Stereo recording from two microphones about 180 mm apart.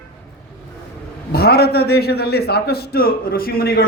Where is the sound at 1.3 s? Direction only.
60° left (ahead or behind).